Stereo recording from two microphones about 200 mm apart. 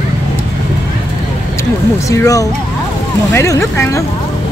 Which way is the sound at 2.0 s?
15° left (ahead or behind).